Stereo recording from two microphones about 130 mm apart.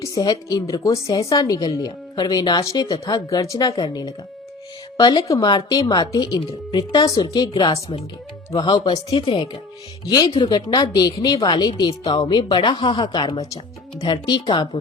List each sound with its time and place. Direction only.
0.0 s speech: 30° left (ahead or behind)